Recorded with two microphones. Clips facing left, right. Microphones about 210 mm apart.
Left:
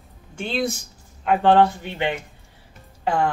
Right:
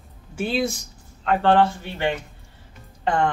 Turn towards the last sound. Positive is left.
turn(degrees=5)  # may be behind; listen again after turning